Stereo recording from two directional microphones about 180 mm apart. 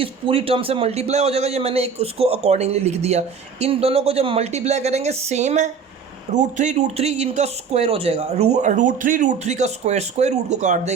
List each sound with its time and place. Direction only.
0.0 s a man's voice: 30° right (ahead or behind)